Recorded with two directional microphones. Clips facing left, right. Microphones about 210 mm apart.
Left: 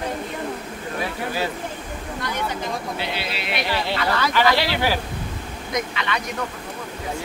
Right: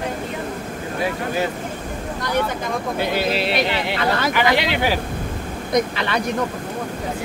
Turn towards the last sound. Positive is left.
turn(degrees=-35)  # may be behind; listen again after turning